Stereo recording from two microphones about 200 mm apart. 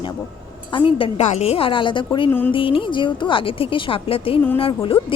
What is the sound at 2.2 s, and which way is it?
Music, 10° left (ahead or behind).